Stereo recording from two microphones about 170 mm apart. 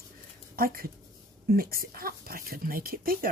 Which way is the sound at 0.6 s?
60° right (ahead or behind).